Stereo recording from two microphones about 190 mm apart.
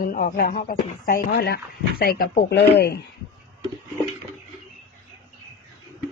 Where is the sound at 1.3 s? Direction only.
60° left (ahead or behind).